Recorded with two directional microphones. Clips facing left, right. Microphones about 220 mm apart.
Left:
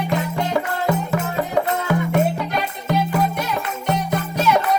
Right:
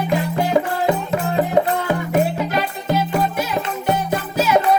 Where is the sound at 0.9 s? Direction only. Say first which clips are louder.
Right 2 dB; 20° right (ahead or behind).